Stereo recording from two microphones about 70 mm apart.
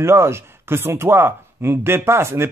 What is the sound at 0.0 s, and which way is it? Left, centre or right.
Speech, right.